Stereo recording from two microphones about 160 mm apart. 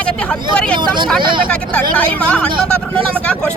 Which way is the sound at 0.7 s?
30° right (ahead or behind).